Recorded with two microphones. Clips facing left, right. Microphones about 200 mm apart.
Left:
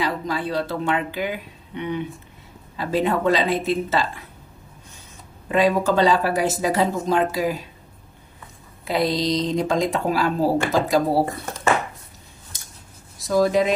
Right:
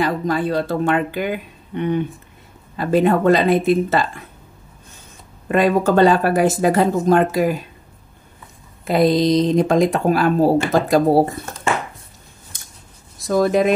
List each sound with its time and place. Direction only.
0.0 s speech: 50° right (ahead or behind)
5.5 s speech: 55° right (ahead or behind)
8.8 s speech: 50° right (ahead or behind)
13.3 s speech: 55° right (ahead or behind)